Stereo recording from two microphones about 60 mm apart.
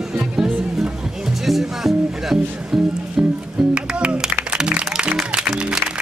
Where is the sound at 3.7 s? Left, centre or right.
Centre.